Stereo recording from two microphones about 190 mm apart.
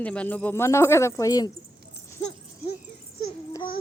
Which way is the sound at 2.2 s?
20° left (ahead or behind).